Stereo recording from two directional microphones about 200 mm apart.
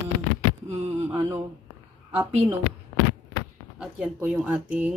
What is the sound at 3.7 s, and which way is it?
Speech, 5° right (ahead or behind).